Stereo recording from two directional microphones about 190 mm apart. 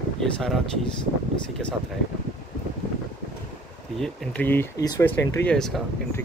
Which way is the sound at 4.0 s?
Centre (ahead or behind).